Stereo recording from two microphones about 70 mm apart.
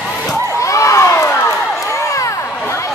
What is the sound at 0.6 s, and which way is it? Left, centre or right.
Crowd, left.